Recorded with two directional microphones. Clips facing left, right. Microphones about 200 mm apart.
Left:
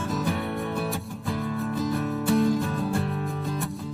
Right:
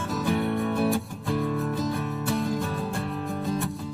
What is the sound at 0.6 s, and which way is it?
Music, centre (ahead or behind).